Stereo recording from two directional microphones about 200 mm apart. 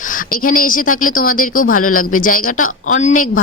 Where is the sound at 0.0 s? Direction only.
40° left (ahead or behind).